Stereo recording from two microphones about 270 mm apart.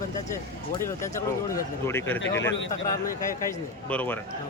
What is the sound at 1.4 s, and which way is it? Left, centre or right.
Speech, centre.